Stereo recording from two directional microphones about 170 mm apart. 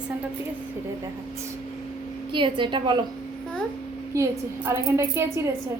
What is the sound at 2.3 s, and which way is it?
Speech, 30° right (ahead or behind).